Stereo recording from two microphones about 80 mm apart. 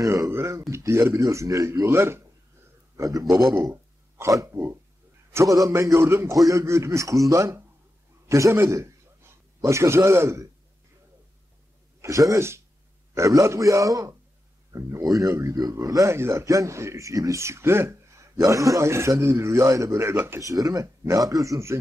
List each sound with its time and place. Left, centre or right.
0.0 s a man's voice: right
3.0 s speech: right
8.3 s a sound: right
9.7 s speech: right
12.0 s a man's voice: right